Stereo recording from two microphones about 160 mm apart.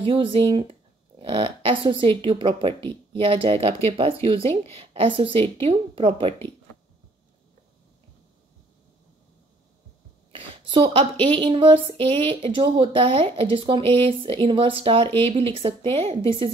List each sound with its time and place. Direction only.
0.0 s speech: 35° right (ahead or behind)
10.3 s a sound: 35° right (ahead or behind)
11.2 s speech: 30° right (ahead or behind)